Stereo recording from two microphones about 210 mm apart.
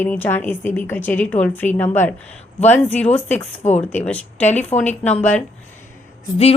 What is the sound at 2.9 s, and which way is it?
Speech, 30° left (ahead or behind).